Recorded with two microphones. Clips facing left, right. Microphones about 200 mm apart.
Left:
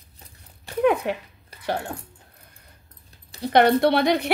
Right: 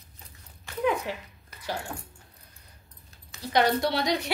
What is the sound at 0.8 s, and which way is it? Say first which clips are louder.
Speech: left 7 dB; 60° left (ahead or behind).